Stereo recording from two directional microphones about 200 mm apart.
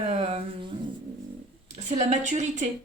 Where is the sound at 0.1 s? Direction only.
30° right (ahead or behind).